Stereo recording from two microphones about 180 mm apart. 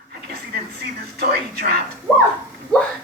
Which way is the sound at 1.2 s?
60° right (ahead or behind).